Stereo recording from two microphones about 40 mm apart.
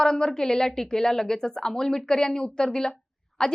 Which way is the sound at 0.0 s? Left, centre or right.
Centre.